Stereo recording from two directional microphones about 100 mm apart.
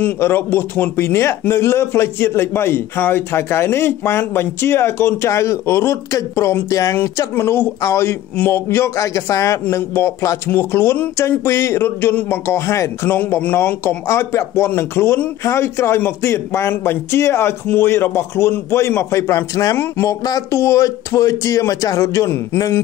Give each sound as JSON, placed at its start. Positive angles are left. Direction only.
{"t": 0.0, "sound": "speech", "side_deg": 20}